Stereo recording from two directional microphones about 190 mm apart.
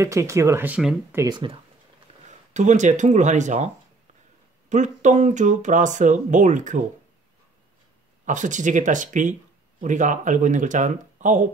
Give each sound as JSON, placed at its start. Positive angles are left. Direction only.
{"t": 0.0, "sound": "speech", "side_deg": -15}
{"t": 1.2, "sound": "speech", "side_deg": -25}
{"t": 2.2, "sound": "speech", "side_deg": -40}
{"t": 8.3, "sound": "speech", "side_deg": -40}